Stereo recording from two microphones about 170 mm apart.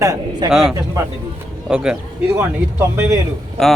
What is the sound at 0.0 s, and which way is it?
Speech, 20° right (ahead or behind).